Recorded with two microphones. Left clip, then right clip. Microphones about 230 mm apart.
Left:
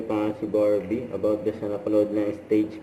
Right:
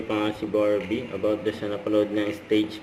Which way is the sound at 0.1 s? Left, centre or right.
Right.